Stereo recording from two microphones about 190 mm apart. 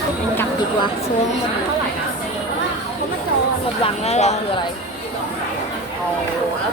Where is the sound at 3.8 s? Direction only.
35° left (ahead or behind).